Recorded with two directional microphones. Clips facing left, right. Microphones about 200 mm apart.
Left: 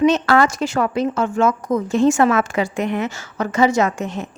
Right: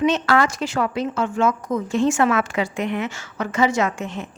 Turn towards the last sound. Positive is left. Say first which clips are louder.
# left 3 dB
turn(degrees=40)  # may be behind; listen again after turning